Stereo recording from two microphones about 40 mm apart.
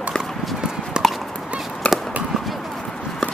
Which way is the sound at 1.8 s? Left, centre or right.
Left.